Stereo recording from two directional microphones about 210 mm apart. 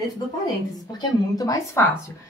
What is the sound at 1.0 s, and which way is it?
Speech, 15° left (ahead or behind).